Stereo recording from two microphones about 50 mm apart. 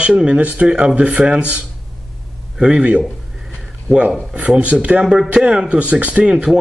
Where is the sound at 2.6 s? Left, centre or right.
Right.